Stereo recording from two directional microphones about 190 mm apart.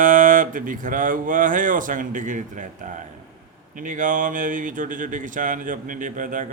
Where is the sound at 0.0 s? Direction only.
45° right (ahead or behind).